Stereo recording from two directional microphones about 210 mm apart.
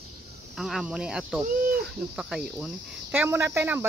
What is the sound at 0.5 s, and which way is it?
Speech, centre (ahead or behind).